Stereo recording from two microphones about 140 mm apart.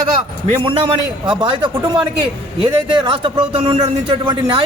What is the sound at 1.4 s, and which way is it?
A man's voice, 35° right (ahead or behind).